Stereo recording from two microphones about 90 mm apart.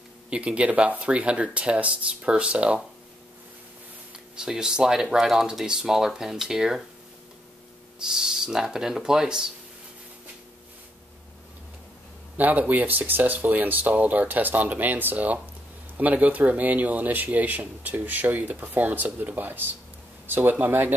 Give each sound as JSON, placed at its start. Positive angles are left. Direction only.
{"t": 0.3, "sound": "speech", "side_deg": -15}
{"t": 4.4, "sound": "speech", "side_deg": -5}
{"t": 8.1, "sound": "speech", "side_deg": -5}
{"t": 12.4, "sound": "speech", "side_deg": -20}